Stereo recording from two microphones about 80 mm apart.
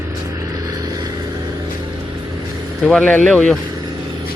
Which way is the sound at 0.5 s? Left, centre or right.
Right.